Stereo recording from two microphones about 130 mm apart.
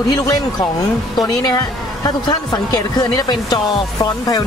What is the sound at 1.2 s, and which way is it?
Speech, 30° left (ahead or behind).